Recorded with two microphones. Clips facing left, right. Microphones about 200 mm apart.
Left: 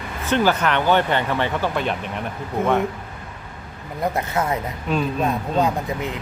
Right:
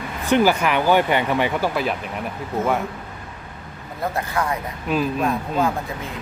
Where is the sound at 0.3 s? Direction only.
10° right (ahead or behind).